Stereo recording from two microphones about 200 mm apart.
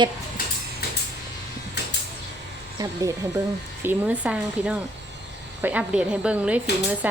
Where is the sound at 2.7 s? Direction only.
15° right (ahead or behind).